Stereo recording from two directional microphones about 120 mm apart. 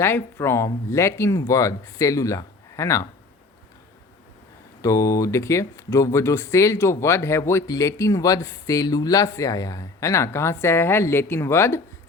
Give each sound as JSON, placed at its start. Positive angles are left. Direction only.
{"t": 0.0, "sound": "speech", "side_deg": 20}
{"t": 4.8, "sound": "speech", "side_deg": 25}